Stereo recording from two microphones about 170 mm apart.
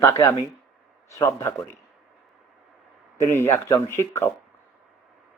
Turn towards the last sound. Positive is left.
turn(degrees=15)  # may be behind; listen again after turning